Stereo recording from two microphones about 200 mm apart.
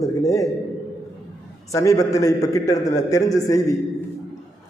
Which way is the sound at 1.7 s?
15° left (ahead or behind).